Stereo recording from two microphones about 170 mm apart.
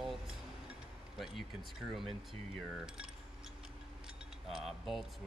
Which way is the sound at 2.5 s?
5° right (ahead or behind).